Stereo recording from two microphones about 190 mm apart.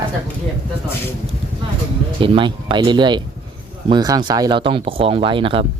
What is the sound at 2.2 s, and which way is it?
Speech, 25° right (ahead or behind).